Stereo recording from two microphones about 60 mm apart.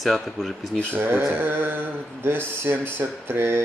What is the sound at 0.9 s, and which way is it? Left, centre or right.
Speech, right.